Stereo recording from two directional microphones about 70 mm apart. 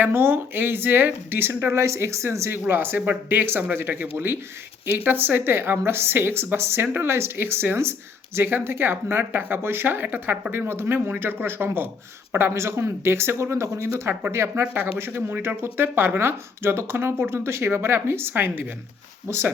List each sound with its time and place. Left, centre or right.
0.0 s speech: right